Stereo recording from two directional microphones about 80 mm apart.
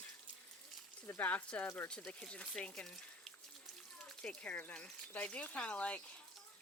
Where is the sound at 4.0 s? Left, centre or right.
Centre.